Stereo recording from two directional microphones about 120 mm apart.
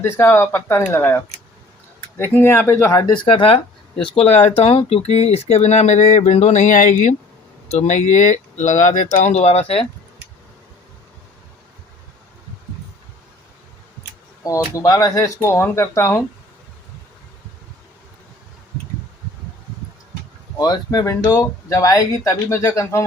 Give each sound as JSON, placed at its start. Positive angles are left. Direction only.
{"t": 0.0, "sound": "speech", "side_deg": 20}
{"t": 3.3, "sound": "speech", "side_deg": 50}
{"t": 7.7, "sound": "speech", "side_deg": 80}
{"t": 14.4, "sound": "speech", "side_deg": 30}
{"t": 20.6, "sound": "speech", "side_deg": 30}